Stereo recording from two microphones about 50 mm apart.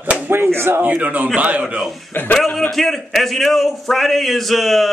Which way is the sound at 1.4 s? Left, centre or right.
Right.